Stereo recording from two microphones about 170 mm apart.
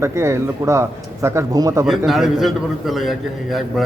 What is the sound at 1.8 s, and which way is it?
A man's voice, centre (ahead or behind).